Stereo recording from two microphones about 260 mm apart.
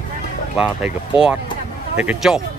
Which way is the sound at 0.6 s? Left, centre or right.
Centre.